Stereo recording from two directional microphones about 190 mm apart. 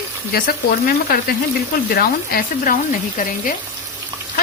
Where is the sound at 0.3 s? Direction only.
50° left (ahead or behind).